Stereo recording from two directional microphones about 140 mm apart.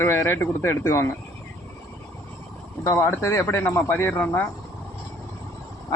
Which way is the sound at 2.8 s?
15° left (ahead or behind).